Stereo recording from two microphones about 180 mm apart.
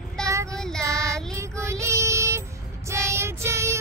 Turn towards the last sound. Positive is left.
turn(degrees=-15)  # may be behind; listen again after turning